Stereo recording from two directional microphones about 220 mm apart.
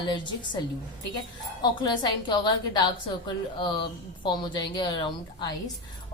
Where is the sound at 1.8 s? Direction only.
20° left (ahead or behind).